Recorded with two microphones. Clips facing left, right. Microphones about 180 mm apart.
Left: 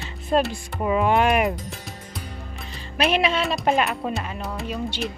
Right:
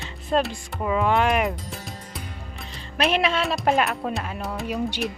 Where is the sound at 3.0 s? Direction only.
Centre (ahead or behind).